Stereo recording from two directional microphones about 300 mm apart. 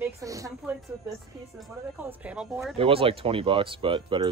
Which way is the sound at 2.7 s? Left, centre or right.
Centre.